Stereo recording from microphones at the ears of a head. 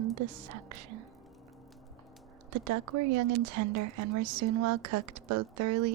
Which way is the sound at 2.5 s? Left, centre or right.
Right.